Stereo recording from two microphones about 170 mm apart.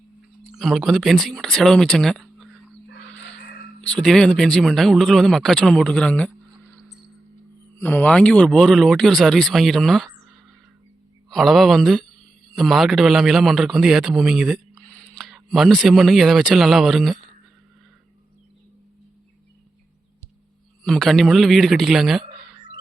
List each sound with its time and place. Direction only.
0.5 s speech: centre (ahead or behind)
3.8 s speech: 5° left (ahead or behind)
7.8 s a man's voice: 10° left (ahead or behind)
20.8 s speech: centre (ahead or behind)